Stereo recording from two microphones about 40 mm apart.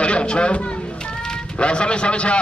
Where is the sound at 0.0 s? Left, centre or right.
Left.